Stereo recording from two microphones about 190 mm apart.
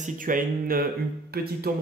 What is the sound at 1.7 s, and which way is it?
Speech, 55° right (ahead or behind).